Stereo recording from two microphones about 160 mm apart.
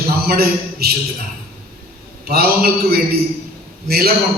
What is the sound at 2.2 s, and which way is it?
Speech, 70° right (ahead or behind).